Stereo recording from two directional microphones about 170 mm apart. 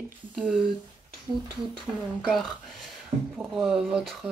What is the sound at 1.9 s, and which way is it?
Speech, 10° right (ahead or behind).